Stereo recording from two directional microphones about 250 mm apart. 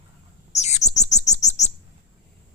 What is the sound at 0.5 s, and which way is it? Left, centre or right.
Bird, left.